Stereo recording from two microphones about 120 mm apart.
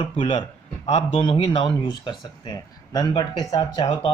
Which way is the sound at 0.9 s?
60° left (ahead or behind).